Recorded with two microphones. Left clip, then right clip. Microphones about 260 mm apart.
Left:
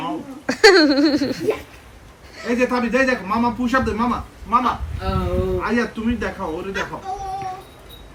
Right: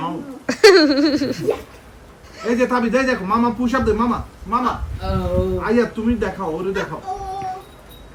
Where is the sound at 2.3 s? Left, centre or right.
Centre.